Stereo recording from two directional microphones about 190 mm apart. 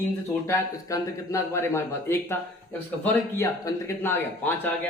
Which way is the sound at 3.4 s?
15° left (ahead or behind).